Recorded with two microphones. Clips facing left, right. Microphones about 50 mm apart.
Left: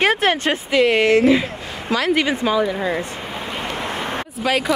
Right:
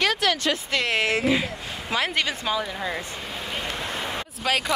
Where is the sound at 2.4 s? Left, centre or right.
Centre.